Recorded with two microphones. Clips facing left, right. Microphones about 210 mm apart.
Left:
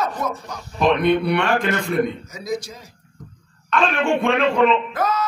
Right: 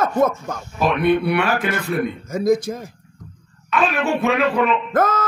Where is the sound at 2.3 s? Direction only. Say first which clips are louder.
Right 9 dB; 50° right (ahead or behind).